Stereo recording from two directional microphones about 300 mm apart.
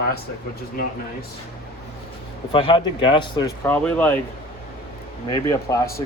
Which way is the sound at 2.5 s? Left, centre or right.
Centre.